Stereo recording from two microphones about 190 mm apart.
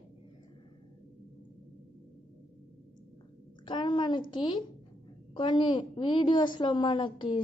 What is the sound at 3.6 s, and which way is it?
A woman's voice, 25° left (ahead or behind).